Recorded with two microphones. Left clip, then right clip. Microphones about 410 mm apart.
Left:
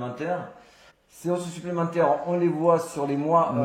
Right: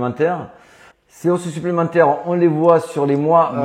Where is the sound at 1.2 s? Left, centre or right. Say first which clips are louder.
Right 9 dB; right.